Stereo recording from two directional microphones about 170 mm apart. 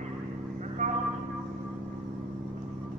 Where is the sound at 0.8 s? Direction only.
50° right (ahead or behind).